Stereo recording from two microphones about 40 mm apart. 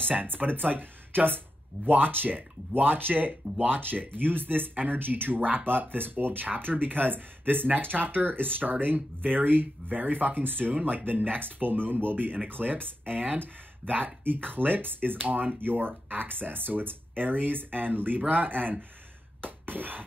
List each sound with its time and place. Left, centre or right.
0.1 s speech: right
13.1 s speech: right
15.2 s speech: right
19.4 s a sound: right